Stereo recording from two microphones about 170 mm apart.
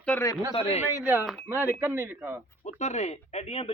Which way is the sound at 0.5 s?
35° left (ahead or behind).